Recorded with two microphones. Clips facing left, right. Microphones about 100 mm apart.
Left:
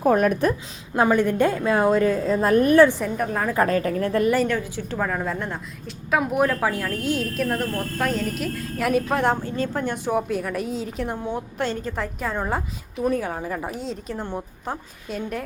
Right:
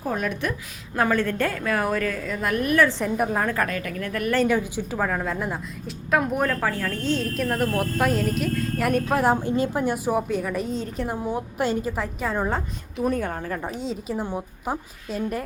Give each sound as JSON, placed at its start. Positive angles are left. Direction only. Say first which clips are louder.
{"t": 0.0, "sound": "a woman's voice", "louder": "left 8 dB", "side_deg": 55}
{"t": 0.9, "sound": "a woman's voice", "louder": "left 4 dB", "side_deg": 20}
{"t": 4.4, "sound": "a woman's voice", "louder": "right 2 dB", "side_deg": -15}
{"t": 4.9, "sound": "a woman's voice", "louder": "even", "side_deg": 0}
{"t": 7.7, "sound": "a woman's voice", "louder": "right 2 dB", "side_deg": -15}
{"t": 9.4, "sound": "a woman's voice", "louder": "right 2 dB", "side_deg": -15}